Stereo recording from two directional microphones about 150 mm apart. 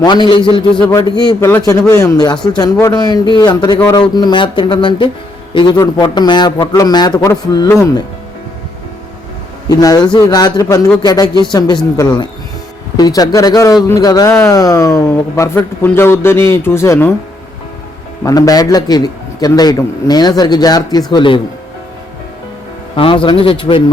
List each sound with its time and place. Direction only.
0.0 s a man's voice: 30° left (ahead or behind)
9.6 s a man's voice: 25° left (ahead or behind)
18.3 s a man's voice: 25° left (ahead or behind)
23.0 s speech: 35° left (ahead or behind)